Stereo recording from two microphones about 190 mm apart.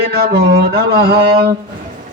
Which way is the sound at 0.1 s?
55° right (ahead or behind).